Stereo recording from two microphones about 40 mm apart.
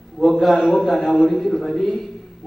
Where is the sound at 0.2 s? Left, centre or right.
Centre.